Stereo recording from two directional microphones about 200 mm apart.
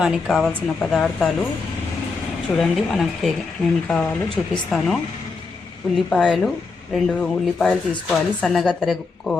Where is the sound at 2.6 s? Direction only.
Centre (ahead or behind).